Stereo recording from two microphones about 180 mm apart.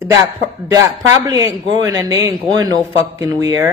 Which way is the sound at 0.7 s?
20° right (ahead or behind).